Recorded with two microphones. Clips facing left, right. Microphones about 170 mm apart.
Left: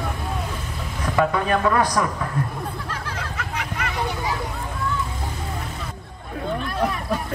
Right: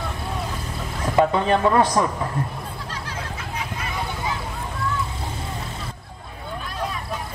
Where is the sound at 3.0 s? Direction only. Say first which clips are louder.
Left 1 dB; 70° left (ahead or behind).